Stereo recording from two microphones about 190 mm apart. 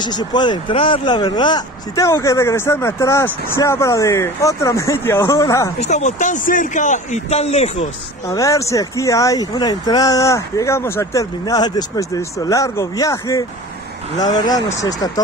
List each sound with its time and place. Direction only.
0.0 s speech: 20° left (ahead or behind)
5.8 s a man's voice: 35° left (ahead or behind)
8.3 s speech: 15° left (ahead or behind)